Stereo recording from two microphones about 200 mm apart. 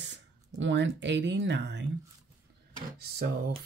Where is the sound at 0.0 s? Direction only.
65° right (ahead or behind).